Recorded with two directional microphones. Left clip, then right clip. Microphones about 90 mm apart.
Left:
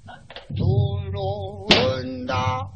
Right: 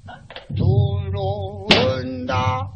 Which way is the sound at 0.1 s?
30° right (ahead or behind).